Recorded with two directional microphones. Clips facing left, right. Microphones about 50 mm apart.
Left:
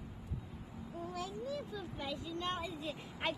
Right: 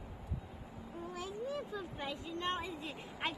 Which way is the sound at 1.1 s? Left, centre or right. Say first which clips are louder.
Right 1 dB; right.